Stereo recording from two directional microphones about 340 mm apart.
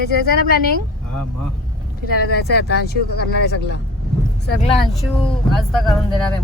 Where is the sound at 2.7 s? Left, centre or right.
Left.